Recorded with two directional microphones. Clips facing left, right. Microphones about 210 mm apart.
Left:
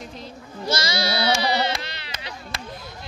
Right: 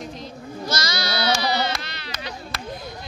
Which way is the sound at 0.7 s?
30° left (ahead or behind).